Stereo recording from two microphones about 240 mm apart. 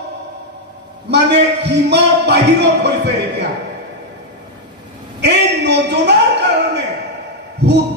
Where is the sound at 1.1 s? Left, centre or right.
Right.